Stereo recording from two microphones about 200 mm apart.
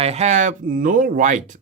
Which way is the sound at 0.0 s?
35° right (ahead or behind).